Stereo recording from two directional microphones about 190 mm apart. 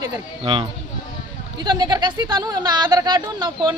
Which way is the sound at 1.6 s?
20° right (ahead or behind).